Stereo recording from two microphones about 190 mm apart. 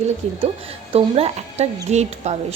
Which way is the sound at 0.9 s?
35° right (ahead or behind).